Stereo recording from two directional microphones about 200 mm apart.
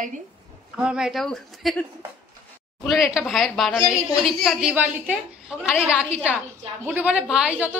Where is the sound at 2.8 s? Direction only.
Centre (ahead or behind).